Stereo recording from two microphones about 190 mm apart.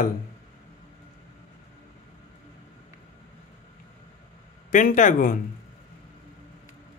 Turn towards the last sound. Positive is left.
turn(degrees=45)  # may be behind; listen again after turning